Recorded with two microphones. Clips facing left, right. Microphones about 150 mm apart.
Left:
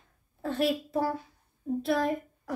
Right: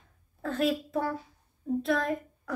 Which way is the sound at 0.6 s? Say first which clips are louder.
Even; 30° left (ahead or behind).